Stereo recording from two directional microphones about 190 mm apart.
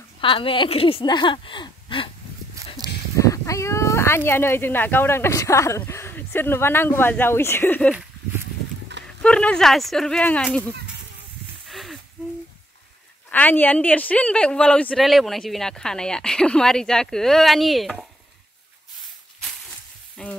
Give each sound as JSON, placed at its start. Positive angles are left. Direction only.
{"t": 0.2, "sound": "speech", "side_deg": 25}
{"t": 3.2, "sound": "speech", "side_deg": 15}
{"t": 9.0, "sound": "speech", "side_deg": 5}
{"t": 11.7, "sound": "a sound", "side_deg": 0}
{"t": 13.3, "sound": "speech", "side_deg": 10}
{"t": 20.2, "sound": "speech", "side_deg": 5}